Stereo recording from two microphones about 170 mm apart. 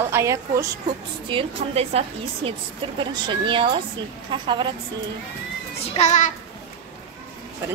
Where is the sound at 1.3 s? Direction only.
35° right (ahead or behind).